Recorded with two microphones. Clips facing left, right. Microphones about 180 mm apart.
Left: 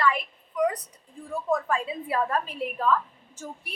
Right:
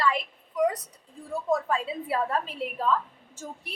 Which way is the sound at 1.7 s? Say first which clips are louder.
Even; 25° right (ahead or behind).